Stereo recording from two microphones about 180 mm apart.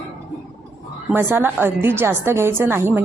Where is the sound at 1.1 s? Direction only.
10° right (ahead or behind).